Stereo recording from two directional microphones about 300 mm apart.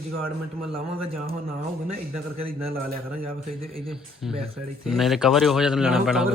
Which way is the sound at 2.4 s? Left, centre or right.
Right.